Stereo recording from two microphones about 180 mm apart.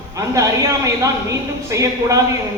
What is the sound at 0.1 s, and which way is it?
A man's voice, 20° right (ahead or behind).